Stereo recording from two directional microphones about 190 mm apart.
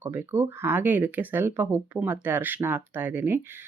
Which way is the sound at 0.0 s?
10° right (ahead or behind).